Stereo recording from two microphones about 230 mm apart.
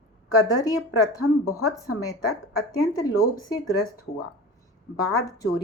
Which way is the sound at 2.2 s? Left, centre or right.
Left.